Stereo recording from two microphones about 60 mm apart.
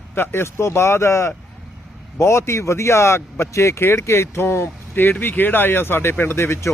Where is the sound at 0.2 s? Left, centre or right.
Left.